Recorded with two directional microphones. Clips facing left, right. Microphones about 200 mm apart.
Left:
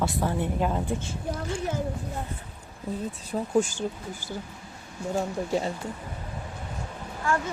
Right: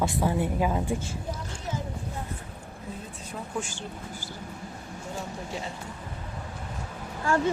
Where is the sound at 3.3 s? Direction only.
40° left (ahead or behind).